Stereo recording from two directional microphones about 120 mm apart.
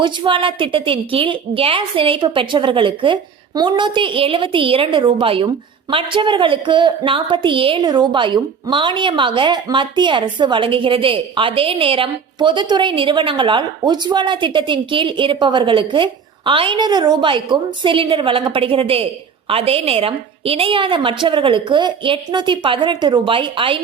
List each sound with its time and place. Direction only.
0.0 s a woman's voice: 45° right (ahead or behind)